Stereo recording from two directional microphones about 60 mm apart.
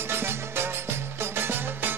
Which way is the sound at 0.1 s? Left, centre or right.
Right.